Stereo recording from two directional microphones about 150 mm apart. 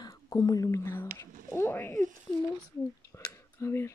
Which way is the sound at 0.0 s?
25° left (ahead or behind).